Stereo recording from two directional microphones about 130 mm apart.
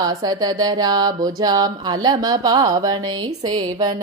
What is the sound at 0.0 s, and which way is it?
Mantra, 30° right (ahead or behind).